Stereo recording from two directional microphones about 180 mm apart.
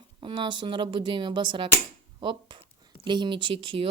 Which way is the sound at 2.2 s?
25° right (ahead or behind).